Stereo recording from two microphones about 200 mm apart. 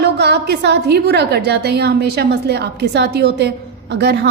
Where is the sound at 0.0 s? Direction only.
55° right (ahead or behind).